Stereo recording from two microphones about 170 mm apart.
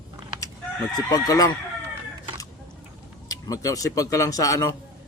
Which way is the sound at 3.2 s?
20° left (ahead or behind).